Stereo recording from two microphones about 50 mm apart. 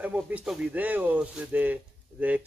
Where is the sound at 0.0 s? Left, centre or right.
Right.